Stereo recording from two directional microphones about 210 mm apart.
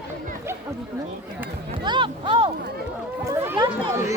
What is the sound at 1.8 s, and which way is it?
Speech, 20° right (ahead or behind).